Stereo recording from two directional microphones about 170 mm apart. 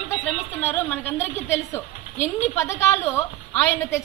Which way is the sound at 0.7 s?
10° left (ahead or behind).